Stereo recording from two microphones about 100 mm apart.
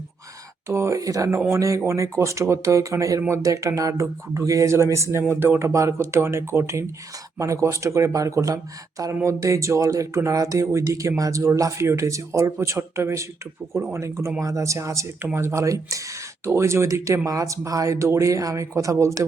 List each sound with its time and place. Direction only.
0.7 s speech: 30° right (ahead or behind)